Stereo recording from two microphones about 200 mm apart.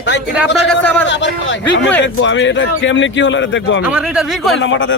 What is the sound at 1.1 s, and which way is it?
Speech, 65° left (ahead or behind).